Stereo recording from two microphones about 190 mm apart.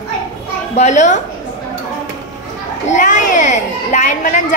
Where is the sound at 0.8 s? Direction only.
40° left (ahead or behind).